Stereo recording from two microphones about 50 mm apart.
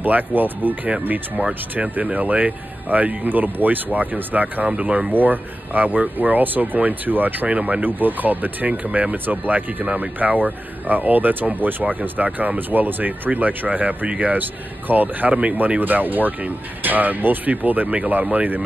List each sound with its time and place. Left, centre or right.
0.0 s speech: right
7.4 s speech: right
7.8 s speech: right